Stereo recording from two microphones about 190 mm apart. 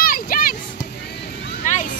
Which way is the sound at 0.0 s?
50° left (ahead or behind).